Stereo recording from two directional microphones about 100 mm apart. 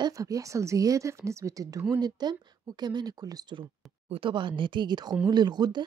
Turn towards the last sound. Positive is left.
turn(degrees=-45)  # may be behind; listen again after turning